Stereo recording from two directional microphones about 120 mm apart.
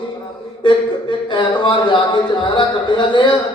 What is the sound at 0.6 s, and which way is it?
Speech, 40° left (ahead or behind).